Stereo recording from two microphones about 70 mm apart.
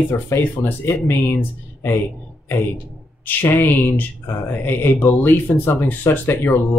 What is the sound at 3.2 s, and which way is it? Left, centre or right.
Speech, left.